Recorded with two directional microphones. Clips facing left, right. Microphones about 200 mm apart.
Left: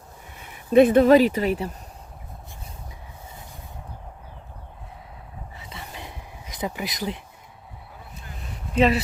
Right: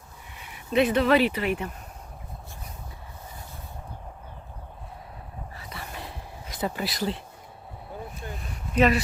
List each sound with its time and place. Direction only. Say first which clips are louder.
0.7 s speech: left 7 dB; 50° left (ahead or behind)
5.5 s a sound: even; 20° left (ahead or behind)
8.7 s speech: left 2 dB; 25° left (ahead or behind)